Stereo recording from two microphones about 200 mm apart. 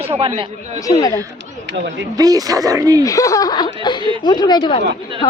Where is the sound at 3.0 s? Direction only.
15° left (ahead or behind).